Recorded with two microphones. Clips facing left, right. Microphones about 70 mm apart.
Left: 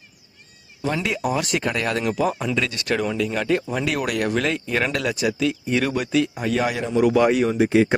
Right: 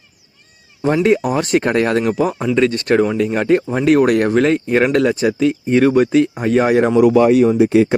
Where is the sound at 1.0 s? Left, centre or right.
Right.